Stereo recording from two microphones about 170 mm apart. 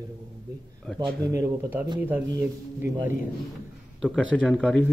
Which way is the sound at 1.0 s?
20° right (ahead or behind).